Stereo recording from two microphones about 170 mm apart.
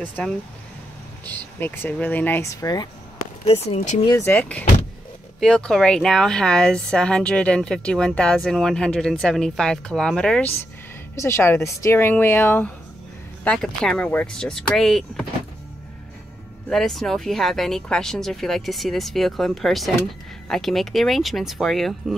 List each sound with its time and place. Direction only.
0.0 s speech: 10° left (ahead or behind)
3.4 s speech: 35° left (ahead or behind)
4.1 s a woman's voice: 15° left (ahead or behind)
16.6 s a woman's voice: centre (ahead or behind)